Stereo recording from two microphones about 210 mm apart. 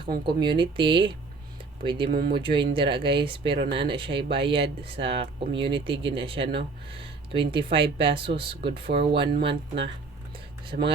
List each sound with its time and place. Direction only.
0.3 s speech: 20° right (ahead or behind)
2.0 s speech: 45° right (ahead or behind)
2.3 s speech: 25° right (ahead or behind)